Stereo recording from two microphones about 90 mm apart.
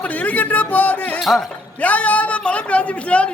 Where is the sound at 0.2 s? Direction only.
15° left (ahead or behind).